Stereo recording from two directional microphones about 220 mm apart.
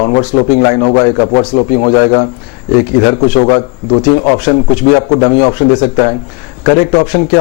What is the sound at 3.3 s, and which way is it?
A man's voice, 30° left (ahead or behind).